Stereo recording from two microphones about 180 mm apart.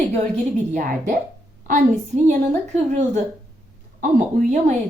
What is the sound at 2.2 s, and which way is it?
Speech, 40° right (ahead or behind).